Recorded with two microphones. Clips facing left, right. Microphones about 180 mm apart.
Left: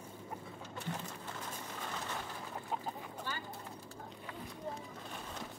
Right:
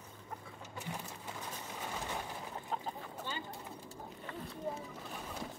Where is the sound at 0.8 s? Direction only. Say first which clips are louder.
Left 1 dB; 10° right (ahead or behind).